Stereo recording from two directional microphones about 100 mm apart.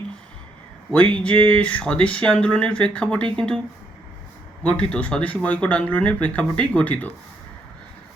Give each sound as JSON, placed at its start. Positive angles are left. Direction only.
{"t": 0.9, "sound": "speech", "side_deg": 10}
{"t": 4.6, "sound": "speech", "side_deg": 10}